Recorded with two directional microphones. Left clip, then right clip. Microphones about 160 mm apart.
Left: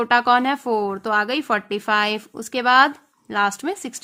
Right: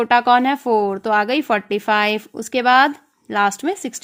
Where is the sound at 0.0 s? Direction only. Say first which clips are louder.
Right 3 dB; 25° right (ahead or behind).